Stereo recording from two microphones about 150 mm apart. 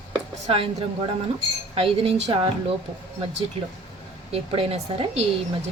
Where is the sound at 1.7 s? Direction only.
40° right (ahead or behind).